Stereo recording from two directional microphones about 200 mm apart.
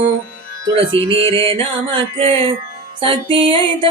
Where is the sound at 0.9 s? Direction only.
25° right (ahead or behind).